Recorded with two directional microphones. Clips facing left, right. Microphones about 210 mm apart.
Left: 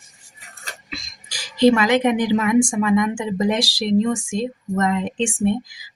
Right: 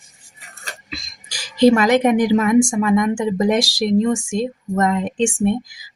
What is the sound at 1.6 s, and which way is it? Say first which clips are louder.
A woman's voice: right 2 dB; 45° right (ahead or behind).